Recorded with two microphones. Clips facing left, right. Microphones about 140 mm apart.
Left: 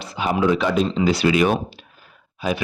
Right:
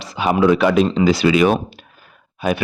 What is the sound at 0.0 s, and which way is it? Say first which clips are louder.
Speech: right 4 dB; 90° right.